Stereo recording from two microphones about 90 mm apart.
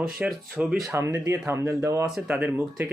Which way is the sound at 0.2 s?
15° right (ahead or behind).